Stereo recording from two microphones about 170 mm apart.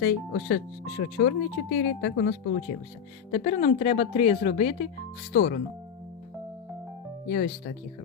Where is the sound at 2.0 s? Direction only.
90° left.